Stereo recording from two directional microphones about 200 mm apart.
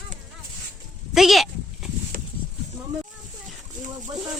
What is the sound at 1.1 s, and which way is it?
Sheep, centre (ahead or behind).